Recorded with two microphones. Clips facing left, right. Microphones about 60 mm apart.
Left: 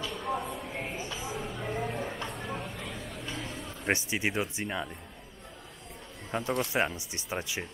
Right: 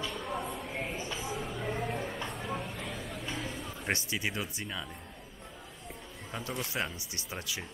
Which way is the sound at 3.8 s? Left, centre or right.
Left.